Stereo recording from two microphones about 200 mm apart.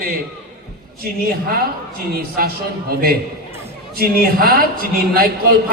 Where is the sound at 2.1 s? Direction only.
45° right (ahead or behind).